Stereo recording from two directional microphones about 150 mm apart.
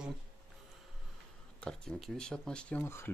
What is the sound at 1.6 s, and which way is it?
Speech, 5° left (ahead or behind).